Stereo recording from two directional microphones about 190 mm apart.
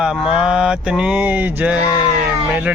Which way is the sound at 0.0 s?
5° right (ahead or behind).